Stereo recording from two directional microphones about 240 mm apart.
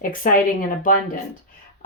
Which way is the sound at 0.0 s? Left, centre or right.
Left.